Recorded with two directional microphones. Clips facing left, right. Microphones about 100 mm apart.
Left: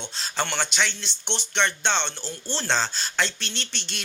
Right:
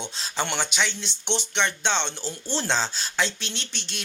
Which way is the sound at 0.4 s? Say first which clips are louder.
Even; 10° right (ahead or behind).